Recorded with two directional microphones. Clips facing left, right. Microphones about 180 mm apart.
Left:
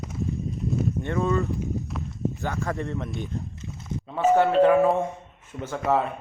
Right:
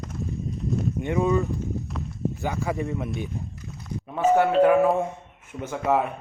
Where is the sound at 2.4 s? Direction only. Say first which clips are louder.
Right 4 dB; 15° right (ahead or behind).